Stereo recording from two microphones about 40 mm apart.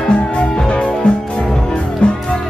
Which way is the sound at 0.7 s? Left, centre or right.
Left.